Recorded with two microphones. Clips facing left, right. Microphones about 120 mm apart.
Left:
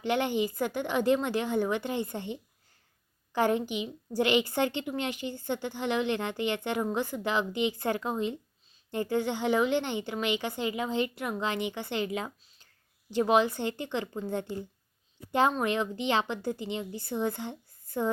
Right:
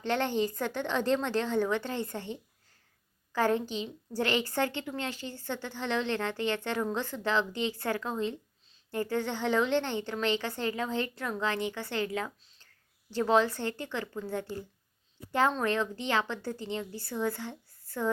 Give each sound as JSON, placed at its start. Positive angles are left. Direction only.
{"t": 0.0, "sound": "a woman's voice", "side_deg": 15}